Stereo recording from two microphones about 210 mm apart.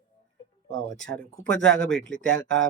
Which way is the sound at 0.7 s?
60° right (ahead or behind).